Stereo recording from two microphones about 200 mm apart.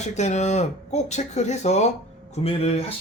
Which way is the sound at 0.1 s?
35° left (ahead or behind).